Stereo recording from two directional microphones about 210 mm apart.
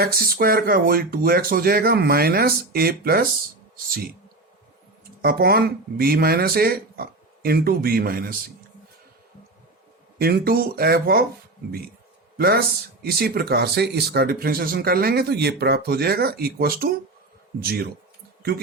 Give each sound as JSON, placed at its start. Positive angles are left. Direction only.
{"t": 0.0, "sound": "speech", "side_deg": -45}
{"t": 5.2, "sound": "speech", "side_deg": -50}
{"t": 10.2, "sound": "speech", "side_deg": -45}
{"t": 12.4, "sound": "speech", "side_deg": -45}